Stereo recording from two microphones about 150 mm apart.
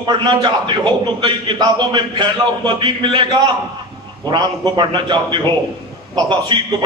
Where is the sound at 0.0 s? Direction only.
30° right (ahead or behind).